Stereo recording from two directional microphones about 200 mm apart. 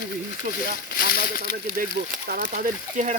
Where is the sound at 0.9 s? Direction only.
50° left (ahead or behind).